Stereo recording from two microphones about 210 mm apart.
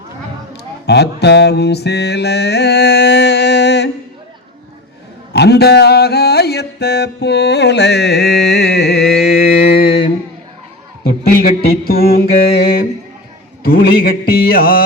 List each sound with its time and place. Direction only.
0.9 s music: 55° left (ahead or behind)
5.3 s music: 50° left (ahead or behind)
11.0 s a sound: 45° left (ahead or behind)
13.6 s mantra: 45° left (ahead or behind)